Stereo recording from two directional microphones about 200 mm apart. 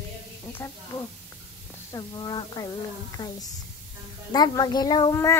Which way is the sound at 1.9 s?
20° left (ahead or behind).